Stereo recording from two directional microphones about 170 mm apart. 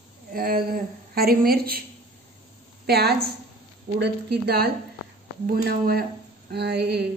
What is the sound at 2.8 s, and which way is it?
A woman's voice, 70° right (ahead or behind).